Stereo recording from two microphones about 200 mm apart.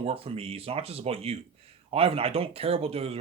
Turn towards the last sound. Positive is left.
turn(degrees=-30)  # may be behind; listen again after turning